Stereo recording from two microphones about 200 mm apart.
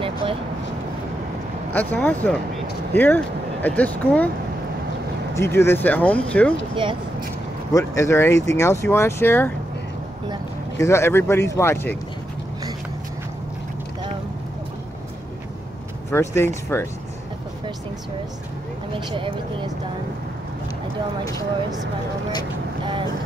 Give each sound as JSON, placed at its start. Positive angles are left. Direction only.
{"t": 0.0, "sound": "vehicle", "side_deg": -25}
{"t": 1.7, "sound": "speech", "side_deg": 10}
{"t": 5.3, "sound": "speech", "side_deg": 15}
{"t": 6.7, "sound": "speech", "side_deg": -25}
{"t": 7.7, "sound": "speech", "side_deg": 15}
{"t": 10.8, "sound": "speech", "side_deg": 15}
{"t": 16.1, "sound": "speech", "side_deg": 10}
{"t": 19.1, "sound": "speech", "side_deg": -25}